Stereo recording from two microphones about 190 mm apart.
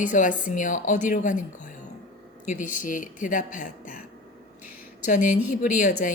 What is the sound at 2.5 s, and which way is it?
A woman's voice, 40° left (ahead or behind).